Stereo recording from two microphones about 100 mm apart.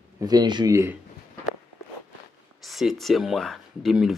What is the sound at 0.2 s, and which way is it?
Speech, 40° right (ahead or behind).